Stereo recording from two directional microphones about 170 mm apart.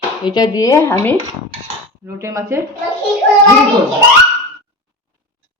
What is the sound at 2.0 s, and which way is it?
Speech, 20° right (ahead or behind).